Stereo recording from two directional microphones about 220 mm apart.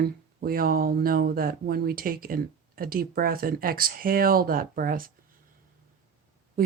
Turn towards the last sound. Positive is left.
turn(degrees=-40)  # may be behind; listen again after turning